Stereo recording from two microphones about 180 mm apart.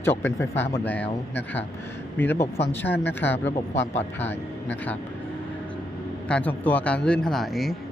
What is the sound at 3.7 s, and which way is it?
Speech, 40° left (ahead or behind).